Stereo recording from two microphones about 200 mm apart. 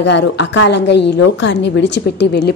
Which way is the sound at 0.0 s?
60° left (ahead or behind).